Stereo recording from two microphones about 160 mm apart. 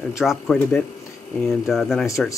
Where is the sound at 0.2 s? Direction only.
Centre (ahead or behind).